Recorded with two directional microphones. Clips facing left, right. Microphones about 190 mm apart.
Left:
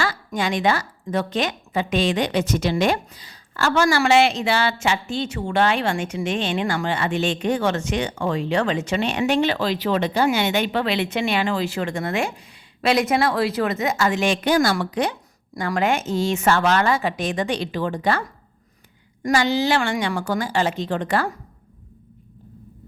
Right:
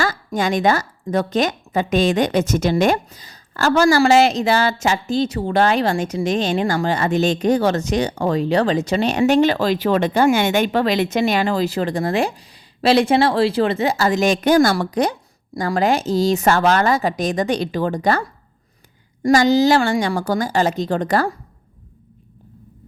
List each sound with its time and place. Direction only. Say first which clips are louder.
0.0 s a woman's voice: right 4 dB; 40° right (ahead or behind)